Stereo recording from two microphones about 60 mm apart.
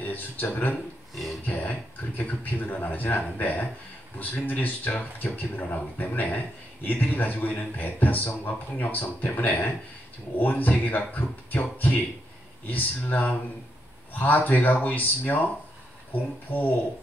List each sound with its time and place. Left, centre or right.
0.0 s speech: left
1.1 s a sound: centre
1.4 s speech: left